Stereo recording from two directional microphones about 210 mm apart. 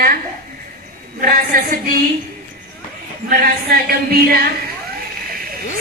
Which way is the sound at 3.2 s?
40° right (ahead or behind).